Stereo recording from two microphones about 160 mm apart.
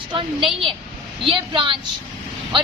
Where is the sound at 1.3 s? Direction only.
30° right (ahead or behind).